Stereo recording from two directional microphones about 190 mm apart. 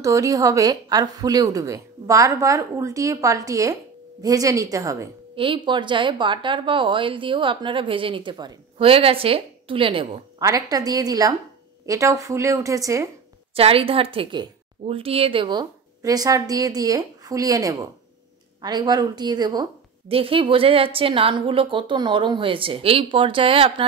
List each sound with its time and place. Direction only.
0.0 s a woman's voice: 15° right (ahead or behind)
13.6 s a woman's voice: 30° right (ahead or behind)